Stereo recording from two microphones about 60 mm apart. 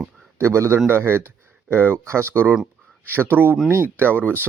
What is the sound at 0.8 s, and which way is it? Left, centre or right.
Speech, right.